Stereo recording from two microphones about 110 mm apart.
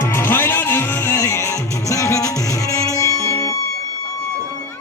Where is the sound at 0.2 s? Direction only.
20° left (ahead or behind).